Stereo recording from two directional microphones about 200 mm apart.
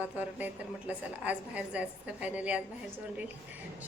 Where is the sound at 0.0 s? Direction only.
10° right (ahead or behind).